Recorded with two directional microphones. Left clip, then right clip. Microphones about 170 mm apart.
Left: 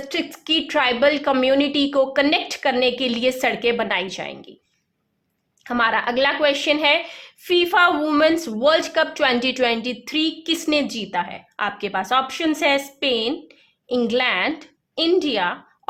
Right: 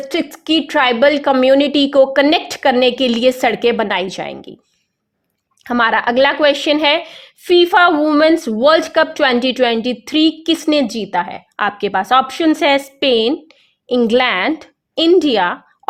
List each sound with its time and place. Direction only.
0.0 s speech: 45° right (ahead or behind)
5.6 s a woman's voice: 45° right (ahead or behind)